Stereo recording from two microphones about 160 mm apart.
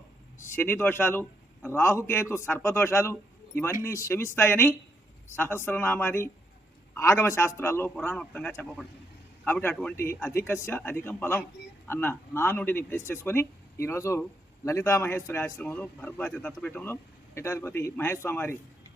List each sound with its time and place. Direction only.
0.5 s a man's voice: 15° left (ahead or behind)